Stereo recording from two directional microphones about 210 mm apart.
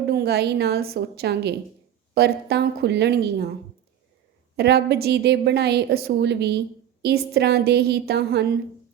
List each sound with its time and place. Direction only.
0.1 s a woman's voice: 50° right (ahead or behind)
4.5 s a woman's voice: 50° right (ahead or behind)